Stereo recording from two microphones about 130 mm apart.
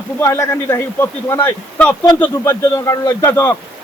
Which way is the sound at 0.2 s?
20° left (ahead or behind).